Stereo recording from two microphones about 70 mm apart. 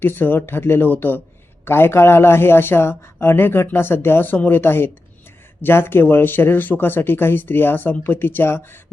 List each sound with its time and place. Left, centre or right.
0.0 s speech: left